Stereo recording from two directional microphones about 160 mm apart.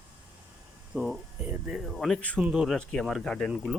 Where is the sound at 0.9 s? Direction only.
5° right (ahead or behind).